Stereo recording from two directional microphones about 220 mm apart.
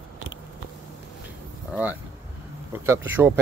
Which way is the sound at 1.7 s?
5° right (ahead or behind).